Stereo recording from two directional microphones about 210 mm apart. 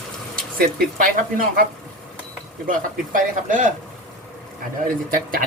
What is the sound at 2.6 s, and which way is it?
Speech, 40° right (ahead or behind).